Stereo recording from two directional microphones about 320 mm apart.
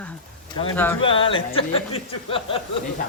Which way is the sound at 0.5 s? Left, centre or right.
Centre.